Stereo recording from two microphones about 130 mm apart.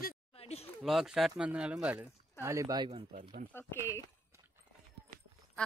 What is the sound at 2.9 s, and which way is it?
Speech, 50° right (ahead or behind).